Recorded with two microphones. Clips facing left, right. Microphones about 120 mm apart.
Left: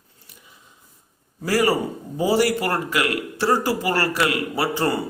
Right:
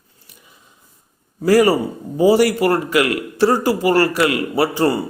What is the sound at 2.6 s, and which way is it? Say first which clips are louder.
A man's voice: right 7 dB; 15° right (ahead or behind).